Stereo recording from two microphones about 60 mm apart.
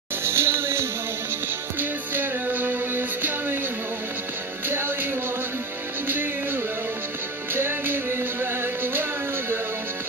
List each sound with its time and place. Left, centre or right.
0.2 s music: right
1.8 s music: right
4.6 s music: right
6.0 s music: right